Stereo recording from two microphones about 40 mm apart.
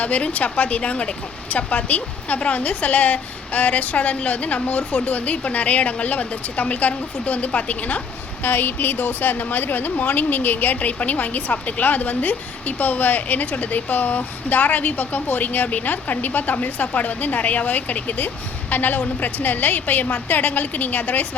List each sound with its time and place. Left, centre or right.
0.0 s speech: left
8.4 s a woman's voice: left